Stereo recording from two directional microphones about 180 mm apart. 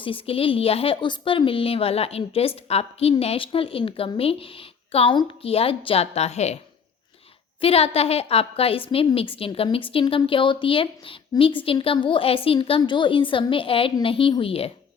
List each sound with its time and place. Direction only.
0.0 s speech: 30° left (ahead or behind)
7.6 s a woman's voice: 35° left (ahead or behind)